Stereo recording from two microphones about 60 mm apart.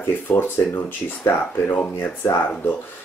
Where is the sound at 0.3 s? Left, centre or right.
Left.